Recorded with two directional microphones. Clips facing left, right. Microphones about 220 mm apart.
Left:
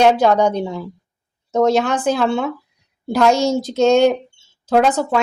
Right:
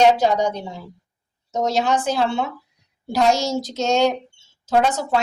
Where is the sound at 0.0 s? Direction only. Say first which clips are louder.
Left 3 dB; 55° left (ahead or behind).